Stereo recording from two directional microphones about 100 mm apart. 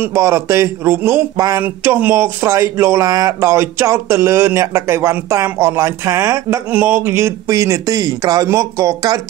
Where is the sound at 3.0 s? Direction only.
35° right (ahead or behind).